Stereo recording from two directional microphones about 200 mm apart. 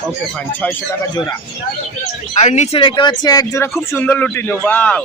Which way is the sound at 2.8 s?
25° left (ahead or behind).